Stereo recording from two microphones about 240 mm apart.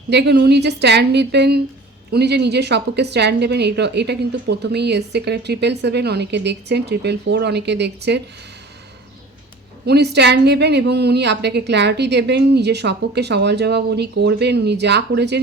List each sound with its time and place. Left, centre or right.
0.1 s a woman's voice: right
9.8 s a woman's voice: right